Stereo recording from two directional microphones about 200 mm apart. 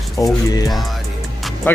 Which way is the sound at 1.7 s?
10° left (ahead or behind).